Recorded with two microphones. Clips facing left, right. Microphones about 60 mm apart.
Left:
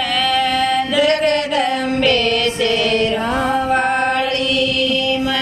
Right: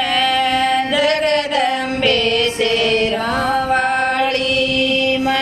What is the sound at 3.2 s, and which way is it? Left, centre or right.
Music, centre.